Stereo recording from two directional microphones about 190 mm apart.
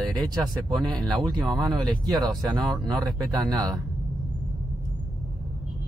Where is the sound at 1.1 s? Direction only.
20° right (ahead or behind).